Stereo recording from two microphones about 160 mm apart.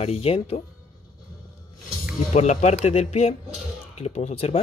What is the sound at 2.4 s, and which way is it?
Speech, 45° left (ahead or behind).